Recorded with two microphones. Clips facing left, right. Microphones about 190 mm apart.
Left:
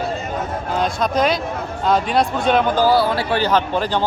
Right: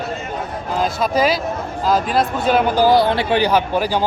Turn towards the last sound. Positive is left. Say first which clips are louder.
# right 1 dB
turn(degrees=-10)  # may be behind; listen again after turning